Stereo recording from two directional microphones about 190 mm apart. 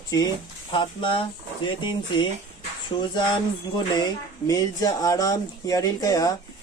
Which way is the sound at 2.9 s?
35° left (ahead or behind).